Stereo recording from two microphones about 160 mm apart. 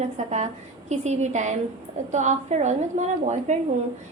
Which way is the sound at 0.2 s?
50° right (ahead or behind).